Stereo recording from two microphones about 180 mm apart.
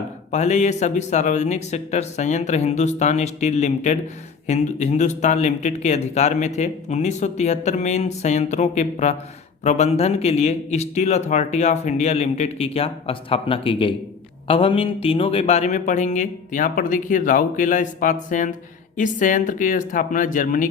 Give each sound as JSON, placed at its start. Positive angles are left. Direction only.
{"t": 0.3, "sound": "a man's voice", "side_deg": 40}